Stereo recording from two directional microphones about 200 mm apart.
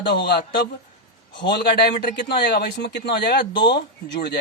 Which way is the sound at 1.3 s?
55° left (ahead or behind).